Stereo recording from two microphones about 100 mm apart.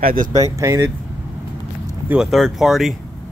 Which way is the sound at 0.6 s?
30° right (ahead or behind).